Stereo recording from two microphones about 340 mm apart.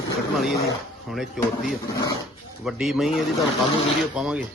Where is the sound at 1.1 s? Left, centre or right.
Centre.